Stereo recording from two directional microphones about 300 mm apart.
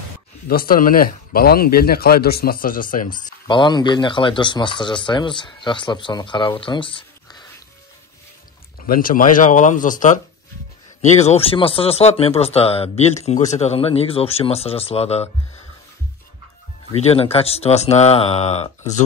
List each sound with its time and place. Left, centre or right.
0.5 s speech: left
3.4 s speech: centre
8.8 s speech: left
16.9 s speech: centre